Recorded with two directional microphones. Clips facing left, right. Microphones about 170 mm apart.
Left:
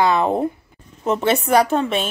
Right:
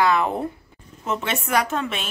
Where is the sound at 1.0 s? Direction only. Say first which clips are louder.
Left 8 dB; 35° left (ahead or behind).